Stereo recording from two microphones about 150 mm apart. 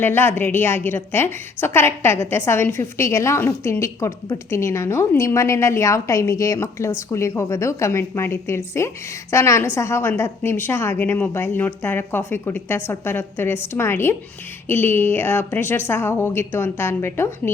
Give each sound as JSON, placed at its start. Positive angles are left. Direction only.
{"t": 0.0, "sound": "a woman's voice", "side_deg": 15}